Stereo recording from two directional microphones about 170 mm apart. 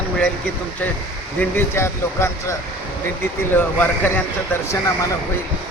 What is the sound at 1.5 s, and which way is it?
Speech, 15° left (ahead or behind).